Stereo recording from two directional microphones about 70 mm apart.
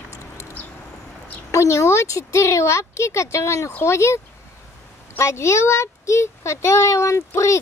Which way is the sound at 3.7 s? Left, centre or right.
Left.